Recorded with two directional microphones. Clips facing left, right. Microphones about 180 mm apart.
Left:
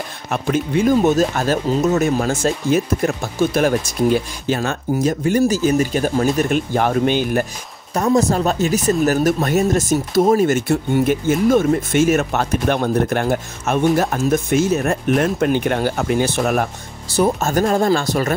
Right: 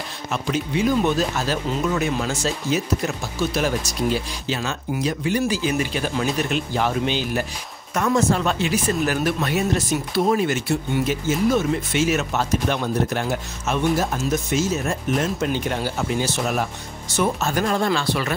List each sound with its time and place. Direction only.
0.3 s speech: 50° left (ahead or behind)
7.9 s speech: 35° left (ahead or behind); by 16.6 s 55° left (ahead or behind)
17.1 s speech: 40° left (ahead or behind)